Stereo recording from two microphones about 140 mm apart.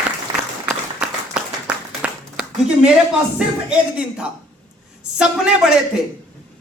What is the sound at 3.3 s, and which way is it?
A man's voice, 10° right (ahead or behind).